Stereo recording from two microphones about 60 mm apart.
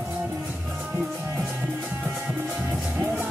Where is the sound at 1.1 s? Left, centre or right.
Right.